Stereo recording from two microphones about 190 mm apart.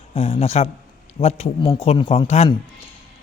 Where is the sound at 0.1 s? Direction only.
30° left (ahead or behind).